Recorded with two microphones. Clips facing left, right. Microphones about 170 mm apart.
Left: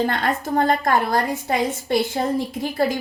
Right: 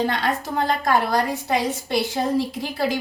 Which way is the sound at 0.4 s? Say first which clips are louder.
Left 3 dB; 50° left (ahead or behind).